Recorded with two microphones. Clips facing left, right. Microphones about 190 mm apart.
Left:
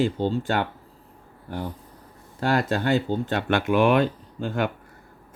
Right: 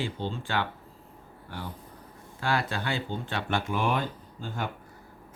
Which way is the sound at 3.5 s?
70° left (ahead or behind).